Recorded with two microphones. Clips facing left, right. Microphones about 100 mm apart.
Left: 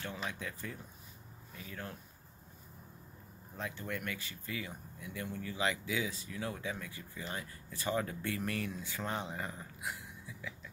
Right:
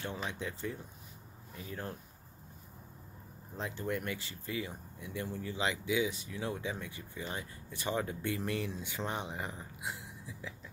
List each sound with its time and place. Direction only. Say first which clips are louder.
0.2 s speech: right 3 dB; 25° right (ahead or behind)
3.5 s speech: right 4 dB; 30° right (ahead or behind)